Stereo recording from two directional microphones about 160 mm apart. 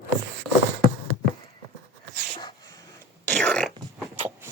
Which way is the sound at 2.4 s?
25° left (ahead or behind).